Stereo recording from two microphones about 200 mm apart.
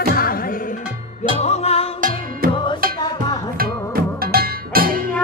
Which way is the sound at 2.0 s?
45° right (ahead or behind).